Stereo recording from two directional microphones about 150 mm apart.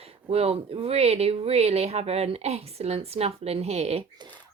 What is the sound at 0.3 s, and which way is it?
Speech, 40° right (ahead or behind).